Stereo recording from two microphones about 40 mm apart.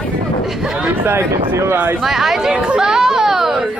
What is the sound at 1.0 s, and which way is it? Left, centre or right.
Speech, right.